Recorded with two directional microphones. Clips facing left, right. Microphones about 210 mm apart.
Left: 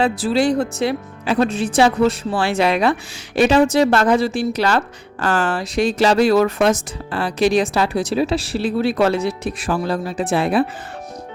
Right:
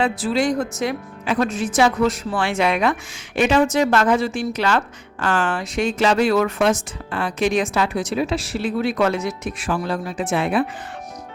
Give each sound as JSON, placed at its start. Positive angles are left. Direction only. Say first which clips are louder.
{"t": 0.0, "sound": "speech", "louder": "left 3 dB", "side_deg": 35}